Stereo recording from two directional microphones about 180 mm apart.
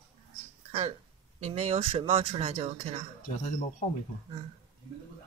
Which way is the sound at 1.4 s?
35° right (ahead or behind).